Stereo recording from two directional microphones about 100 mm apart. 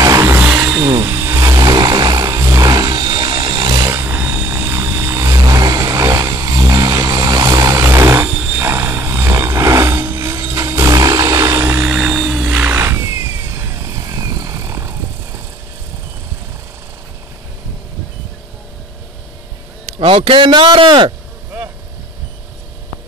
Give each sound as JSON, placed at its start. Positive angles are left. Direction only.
{"t": 0.0, "sound": "vehicle", "side_deg": -35}
{"t": 0.5, "sound": "vehicle", "side_deg": -15}
{"t": 0.7, "sound": "a sound", "side_deg": -40}
{"t": 1.0, "sound": "vehicle", "side_deg": -30}
{"t": 1.6, "sound": "a sound", "side_deg": -40}
{"t": 3.8, "sound": "vehicle", "side_deg": -25}
{"t": 11.9, "sound": "helicopter", "side_deg": -5}
{"t": 12.4, "sound": "vehicle", "side_deg": -20}
{"t": 20.0, "sound": "speech", "side_deg": -65}